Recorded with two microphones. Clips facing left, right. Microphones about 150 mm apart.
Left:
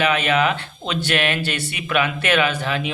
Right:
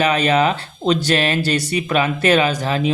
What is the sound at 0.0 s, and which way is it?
Speech, 40° right (ahead or behind).